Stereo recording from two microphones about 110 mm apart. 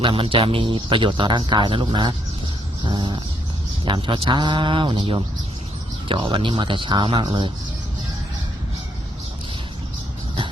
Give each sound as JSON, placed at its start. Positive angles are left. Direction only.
{"t": 0.0, "sound": "speech", "side_deg": -50}
{"t": 2.8, "sound": "a sound", "side_deg": -45}
{"t": 3.8, "sound": "speech", "side_deg": -45}